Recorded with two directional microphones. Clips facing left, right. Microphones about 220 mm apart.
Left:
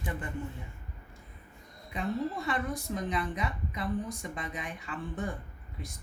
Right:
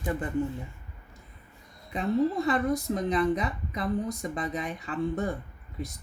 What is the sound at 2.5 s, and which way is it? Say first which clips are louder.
Speech: right 7 dB; 35° right (ahead or behind).